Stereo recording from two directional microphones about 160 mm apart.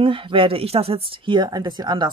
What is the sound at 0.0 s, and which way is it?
A woman's voice, 35° right (ahead or behind).